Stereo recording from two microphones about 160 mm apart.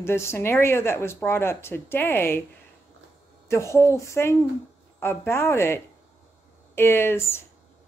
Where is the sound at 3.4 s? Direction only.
15° left (ahead or behind).